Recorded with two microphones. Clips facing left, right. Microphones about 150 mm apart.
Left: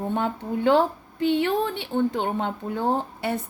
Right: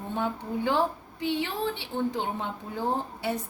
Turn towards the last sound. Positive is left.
turn(degrees=65)  # may be behind; listen again after turning